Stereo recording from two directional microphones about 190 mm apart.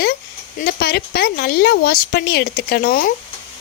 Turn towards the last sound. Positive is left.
turn(degrees=55)  # may be behind; listen again after turning